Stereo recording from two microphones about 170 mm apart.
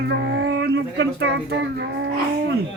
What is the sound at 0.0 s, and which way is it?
Speech, 75° right (ahead or behind).